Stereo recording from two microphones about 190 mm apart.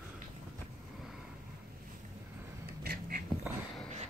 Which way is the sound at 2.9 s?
55° right (ahead or behind).